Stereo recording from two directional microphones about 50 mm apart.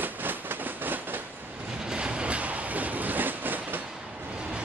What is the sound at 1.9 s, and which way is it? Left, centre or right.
Train, centre.